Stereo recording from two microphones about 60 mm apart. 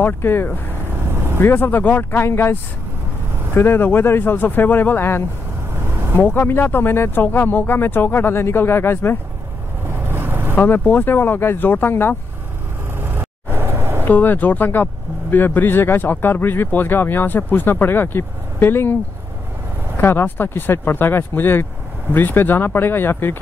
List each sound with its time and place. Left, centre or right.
0.0 s speech: left
9.8 s vehicle: right
10.5 s speech: left
13.0 s vehicle: right
14.0 s speech: left
20.0 s speech: left